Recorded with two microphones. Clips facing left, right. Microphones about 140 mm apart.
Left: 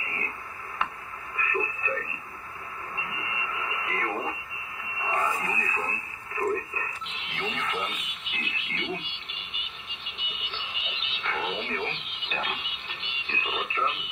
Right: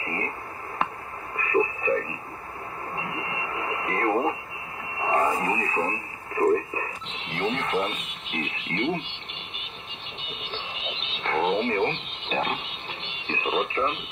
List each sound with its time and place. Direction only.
0.0 s a sound: 40° right (ahead or behind)
1.3 s radio: 40° right (ahead or behind)
10.1 s music: 35° right (ahead or behind)